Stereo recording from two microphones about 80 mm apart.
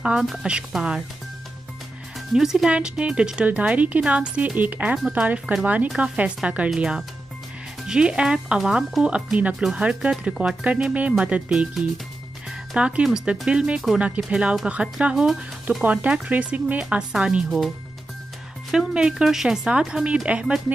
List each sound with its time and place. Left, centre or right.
0.0 s speech: centre
2.3 s speech: centre
18.7 s speech: centre